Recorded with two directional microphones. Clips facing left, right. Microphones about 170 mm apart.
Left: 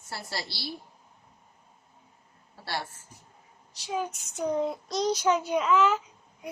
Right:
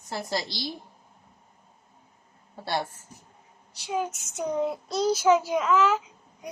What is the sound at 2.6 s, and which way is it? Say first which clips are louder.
Speech: right 5 dB; 20° right (ahead or behind).